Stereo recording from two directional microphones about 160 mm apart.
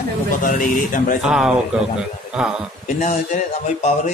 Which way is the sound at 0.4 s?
55° left (ahead or behind).